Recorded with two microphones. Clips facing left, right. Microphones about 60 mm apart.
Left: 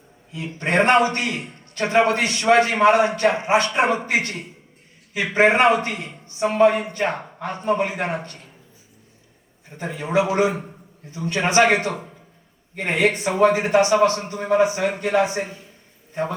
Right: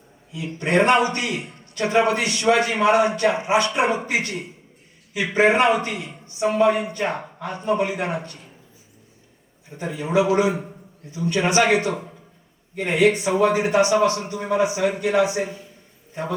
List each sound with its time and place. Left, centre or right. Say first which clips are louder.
0.3 s a man's voice: even; left
9.7 s a man's voice: even; left